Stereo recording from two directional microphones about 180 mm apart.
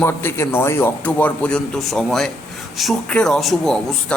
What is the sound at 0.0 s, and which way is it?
A man's voice, 15° left (ahead or behind).